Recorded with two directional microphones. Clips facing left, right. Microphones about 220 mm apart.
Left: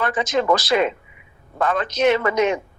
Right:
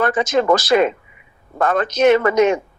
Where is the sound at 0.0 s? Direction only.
45° right (ahead or behind).